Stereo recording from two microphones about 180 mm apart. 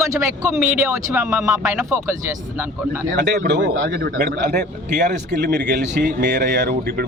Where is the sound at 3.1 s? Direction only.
70° right (ahead or behind).